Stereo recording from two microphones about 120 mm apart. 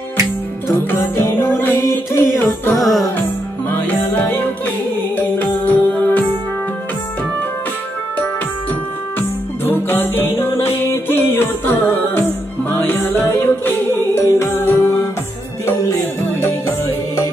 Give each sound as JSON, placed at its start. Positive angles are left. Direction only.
{"t": 0.7, "sound": "music", "side_deg": 20}
{"t": 2.7, "sound": "music", "side_deg": 0}
{"t": 3.7, "sound": "music", "side_deg": 15}
{"t": 9.7, "sound": "music", "side_deg": 15}